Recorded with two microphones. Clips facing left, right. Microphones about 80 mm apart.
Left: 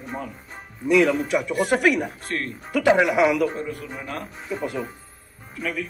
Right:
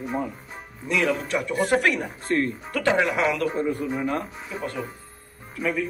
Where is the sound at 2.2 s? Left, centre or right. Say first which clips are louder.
Right 5 dB; centre.